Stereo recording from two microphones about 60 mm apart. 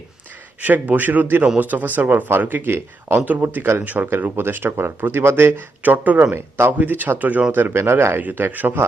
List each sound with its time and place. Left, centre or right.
0.6 s speech: right
3.2 s speech: right
6.3 s speech: right
7.8 s speech: right
8.2 s speech: right